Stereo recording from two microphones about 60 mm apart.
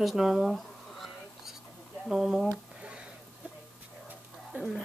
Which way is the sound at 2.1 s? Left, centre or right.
Centre.